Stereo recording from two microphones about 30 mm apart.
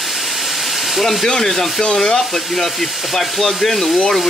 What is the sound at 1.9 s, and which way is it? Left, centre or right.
Speech, left.